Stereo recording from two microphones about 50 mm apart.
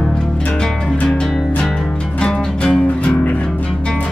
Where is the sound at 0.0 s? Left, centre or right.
Centre.